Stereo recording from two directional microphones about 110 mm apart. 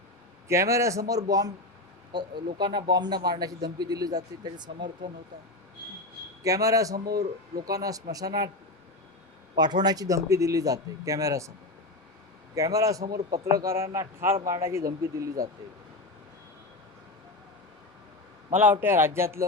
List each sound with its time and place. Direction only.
0.4 s a man's voice: 25° right (ahead or behind); by 4.9 s 45° right (ahead or behind)
6.4 s a man's voice: 30° right (ahead or behind)
9.6 s a man's voice: 40° right (ahead or behind)
12.5 s a man's voice: 30° right (ahead or behind)
18.5 s speech: 15° right (ahead or behind)